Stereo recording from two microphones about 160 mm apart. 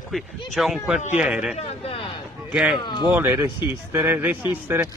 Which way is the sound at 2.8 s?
30° left (ahead or behind).